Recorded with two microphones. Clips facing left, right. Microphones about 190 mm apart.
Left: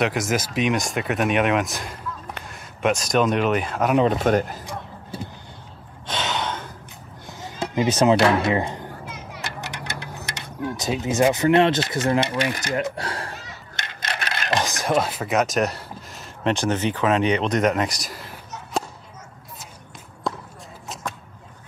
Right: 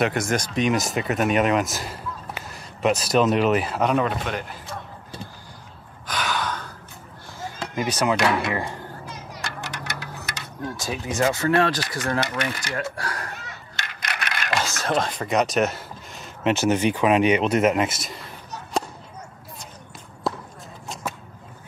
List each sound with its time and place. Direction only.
0.0 s speech: centre (ahead or behind)
4.1 s a man's voice: 45° left (ahead or behind)
6.0 s gasp: 25° left (ahead or behind)
7.2 s speech: 25° left (ahead or behind)
9.4 s children playing: 20° left (ahead or behind)
10.6 s speech: 20° left (ahead or behind); by 18.2 s centre (ahead or behind)
20.2 s basketball bounce: 5° right (ahead or behind)
20.9 s a sound: centre (ahead or behind)